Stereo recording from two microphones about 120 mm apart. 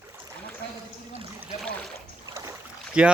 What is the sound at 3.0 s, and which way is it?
Speech, 10° right (ahead or behind).